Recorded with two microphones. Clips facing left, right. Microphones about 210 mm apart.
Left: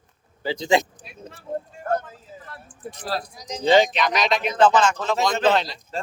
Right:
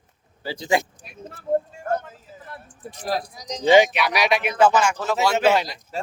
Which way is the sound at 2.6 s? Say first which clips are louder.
Right 3 dB; 15° right (ahead or behind).